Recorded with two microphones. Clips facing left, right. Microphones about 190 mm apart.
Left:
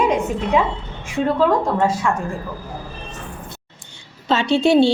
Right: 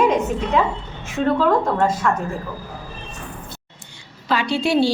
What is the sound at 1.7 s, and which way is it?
Speech, 10° left (ahead or behind).